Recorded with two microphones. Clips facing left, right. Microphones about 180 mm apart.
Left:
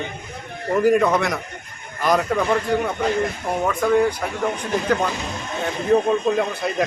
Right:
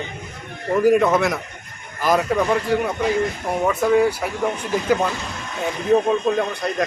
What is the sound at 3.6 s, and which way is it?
Speech, 5° right (ahead or behind).